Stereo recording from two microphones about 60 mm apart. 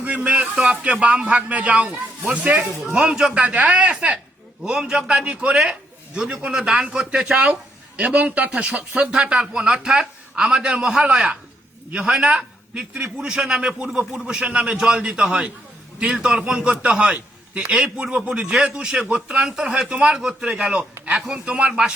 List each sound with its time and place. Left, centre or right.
0.0 s speech: right
2.8 s a man's voice: centre
3.4 s speech: right
4.6 s a man's voice: centre
21.3 s speech: centre
21.7 s a man's voice: centre